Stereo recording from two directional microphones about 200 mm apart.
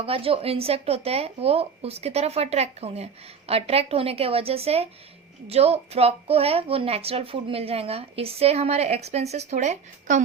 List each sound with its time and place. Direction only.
0.0 s speech: 30° right (ahead or behind)